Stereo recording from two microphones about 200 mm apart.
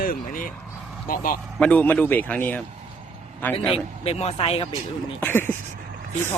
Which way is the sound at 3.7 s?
30° left (ahead or behind).